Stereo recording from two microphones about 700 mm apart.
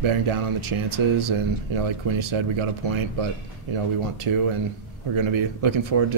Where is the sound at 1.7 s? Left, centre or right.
Right.